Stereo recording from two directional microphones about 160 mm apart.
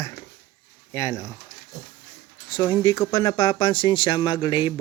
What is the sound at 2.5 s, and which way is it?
Speech, 25° left (ahead or behind).